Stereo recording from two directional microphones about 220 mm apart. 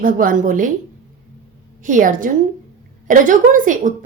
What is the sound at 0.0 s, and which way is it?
Speech, 40° right (ahead or behind).